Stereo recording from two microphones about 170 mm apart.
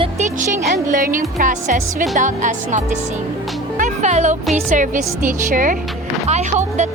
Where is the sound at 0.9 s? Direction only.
55° right (ahead or behind).